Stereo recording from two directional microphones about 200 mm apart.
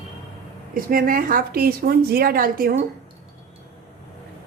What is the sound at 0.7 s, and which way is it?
A woman's voice, 45° right (ahead or behind).